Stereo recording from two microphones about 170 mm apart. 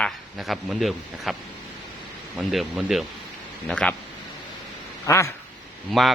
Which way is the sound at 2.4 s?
Centre (ahead or behind).